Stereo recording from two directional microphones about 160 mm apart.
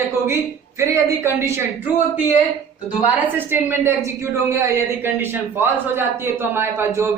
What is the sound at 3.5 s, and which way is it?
A woman's voice, 15° right (ahead or behind).